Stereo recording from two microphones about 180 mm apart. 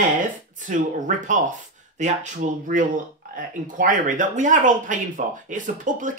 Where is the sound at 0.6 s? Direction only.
45° right (ahead or behind).